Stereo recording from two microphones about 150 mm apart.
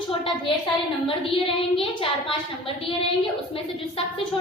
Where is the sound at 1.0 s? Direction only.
35° left (ahead or behind).